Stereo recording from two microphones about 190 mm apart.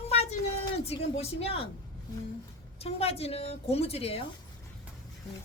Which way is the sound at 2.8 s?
30° left (ahead or behind).